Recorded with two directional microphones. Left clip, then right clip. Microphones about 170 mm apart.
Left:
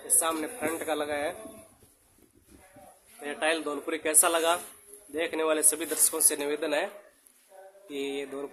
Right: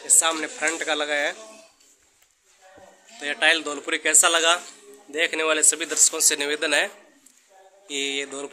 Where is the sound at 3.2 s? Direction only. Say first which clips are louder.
Right 8 dB; 10° left (ahead or behind).